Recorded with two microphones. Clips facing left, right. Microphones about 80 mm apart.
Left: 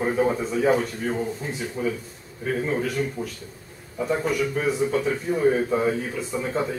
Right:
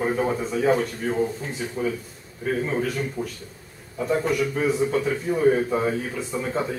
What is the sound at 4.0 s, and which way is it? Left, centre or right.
Speech, centre.